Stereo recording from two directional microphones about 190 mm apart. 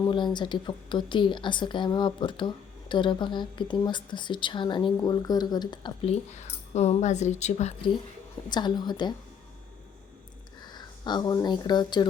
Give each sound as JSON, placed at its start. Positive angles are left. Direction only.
{"t": 0.0, "sound": "a woman's voice", "side_deg": 25}
{"t": 8.4, "sound": "a woman's voice", "side_deg": 20}
{"t": 10.6, "sound": "speech", "side_deg": 20}